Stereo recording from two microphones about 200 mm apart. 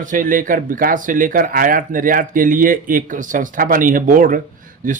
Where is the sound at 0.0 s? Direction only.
40° right (ahead or behind).